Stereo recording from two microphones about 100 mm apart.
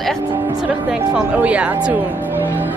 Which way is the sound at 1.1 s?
10° right (ahead or behind).